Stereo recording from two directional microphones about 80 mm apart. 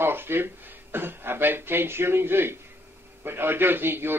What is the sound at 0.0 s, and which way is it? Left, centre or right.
Speech, right.